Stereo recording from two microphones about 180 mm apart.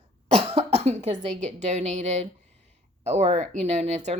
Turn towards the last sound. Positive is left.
turn(degrees=-40)  # may be behind; listen again after turning